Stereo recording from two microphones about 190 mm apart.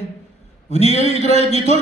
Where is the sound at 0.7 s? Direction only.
35° left (ahead or behind).